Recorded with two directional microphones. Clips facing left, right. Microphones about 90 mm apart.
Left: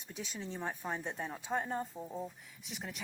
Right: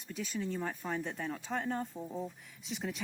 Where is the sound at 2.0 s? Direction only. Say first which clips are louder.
Right 2 dB; centre (ahead or behind).